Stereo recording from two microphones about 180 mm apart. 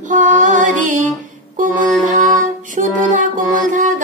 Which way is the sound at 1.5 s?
45° right (ahead or behind).